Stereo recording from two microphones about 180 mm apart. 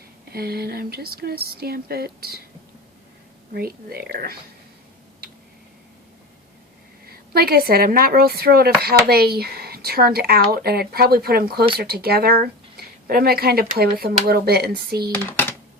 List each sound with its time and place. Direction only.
0.3 s a woman's voice: 60° right (ahead or behind)
3.5 s a woman's voice: 60° right (ahead or behind)
7.1 s a woman's voice: 60° right (ahead or behind)
15.1 s speech: 10° left (ahead or behind)